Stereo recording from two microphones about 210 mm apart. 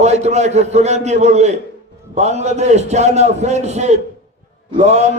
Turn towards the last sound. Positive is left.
turn(degrees=-35)  # may be behind; listen again after turning